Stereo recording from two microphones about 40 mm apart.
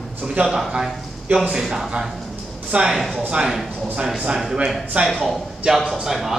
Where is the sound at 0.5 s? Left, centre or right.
Centre.